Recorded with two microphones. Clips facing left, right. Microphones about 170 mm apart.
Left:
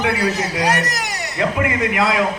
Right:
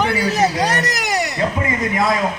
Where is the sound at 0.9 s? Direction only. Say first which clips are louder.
Right 5 dB; 70° right (ahead or behind).